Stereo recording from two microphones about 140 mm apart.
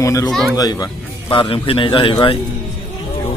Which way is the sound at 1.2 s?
35° left (ahead or behind).